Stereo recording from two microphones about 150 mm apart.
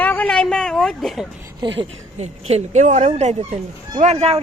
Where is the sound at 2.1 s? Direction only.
50° right (ahead or behind).